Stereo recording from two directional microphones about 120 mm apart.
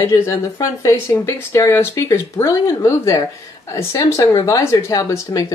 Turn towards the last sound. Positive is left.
turn(degrees=30)  # may be behind; listen again after turning